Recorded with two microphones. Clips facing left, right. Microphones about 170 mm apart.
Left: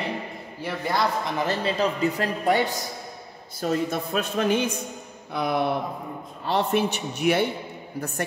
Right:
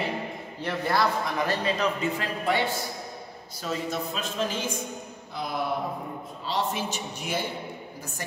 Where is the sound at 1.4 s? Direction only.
35° left (ahead or behind).